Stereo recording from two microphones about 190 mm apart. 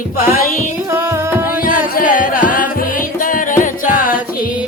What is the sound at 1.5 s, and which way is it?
Music, 45° left (ahead or behind).